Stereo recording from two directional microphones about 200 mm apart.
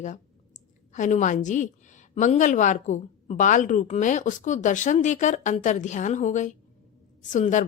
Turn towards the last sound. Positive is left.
turn(degrees=40)  # may be behind; listen again after turning